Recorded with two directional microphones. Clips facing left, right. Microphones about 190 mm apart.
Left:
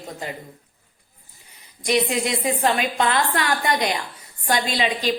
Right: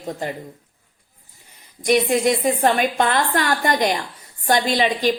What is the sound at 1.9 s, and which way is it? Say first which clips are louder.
A woman's voice: right 4 dB; 50° right (ahead or behind).